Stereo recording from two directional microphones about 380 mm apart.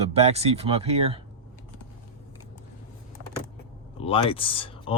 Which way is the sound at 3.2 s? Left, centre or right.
Right.